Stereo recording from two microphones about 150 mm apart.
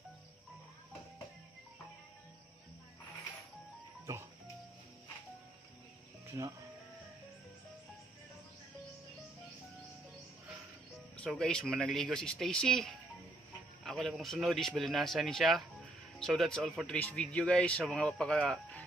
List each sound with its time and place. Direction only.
4.0 s music: 20° right (ahead or behind)
6.2 s music: 20° right (ahead or behind)
11.1 s speech: 5° left (ahead or behind)